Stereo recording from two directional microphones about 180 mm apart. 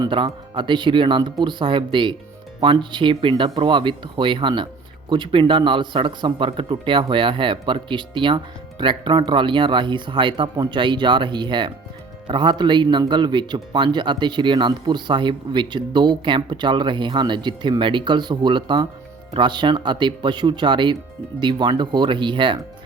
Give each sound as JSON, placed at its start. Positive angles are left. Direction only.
{"t": 0.0, "sound": "a man's voice", "side_deg": -30}